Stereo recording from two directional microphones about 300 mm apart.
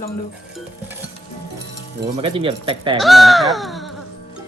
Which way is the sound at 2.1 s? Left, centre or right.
Centre.